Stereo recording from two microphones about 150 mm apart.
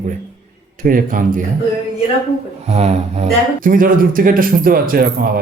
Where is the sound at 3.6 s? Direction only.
65° right (ahead or behind).